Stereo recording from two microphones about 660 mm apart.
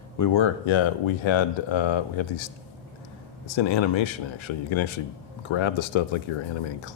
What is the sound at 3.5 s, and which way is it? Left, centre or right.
Speech, left.